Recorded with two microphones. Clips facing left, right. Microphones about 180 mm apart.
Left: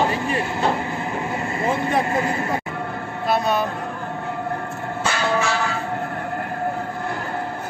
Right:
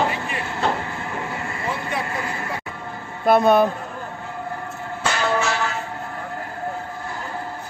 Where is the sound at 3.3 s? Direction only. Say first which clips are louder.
Right 6 dB; 55° right (ahead or behind).